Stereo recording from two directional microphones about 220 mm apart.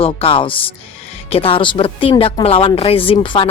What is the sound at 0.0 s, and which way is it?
Speech, 25° left (ahead or behind).